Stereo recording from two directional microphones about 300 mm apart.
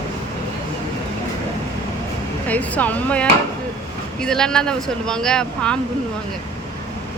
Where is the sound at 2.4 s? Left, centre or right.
Centre.